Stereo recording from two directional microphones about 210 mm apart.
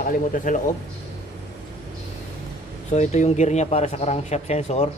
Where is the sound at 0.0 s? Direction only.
40° left (ahead or behind).